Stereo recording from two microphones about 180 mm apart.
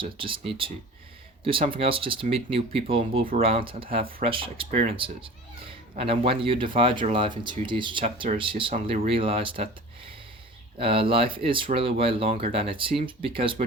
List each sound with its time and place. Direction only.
0.0 s a child's voice: 30° right (ahead or behind)
1.7 s a child's voice: 30° right (ahead or behind)
10.8 s a child's voice: 30° right (ahead or behind)